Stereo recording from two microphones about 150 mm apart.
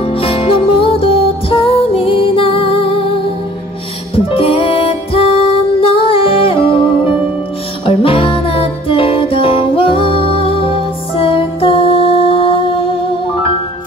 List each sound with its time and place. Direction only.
0.0 s music: 40° left (ahead or behind)
4.3 s music: 40° left (ahead or behind)